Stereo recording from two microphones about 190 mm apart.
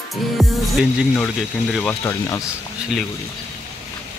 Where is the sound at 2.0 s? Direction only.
15° left (ahead or behind).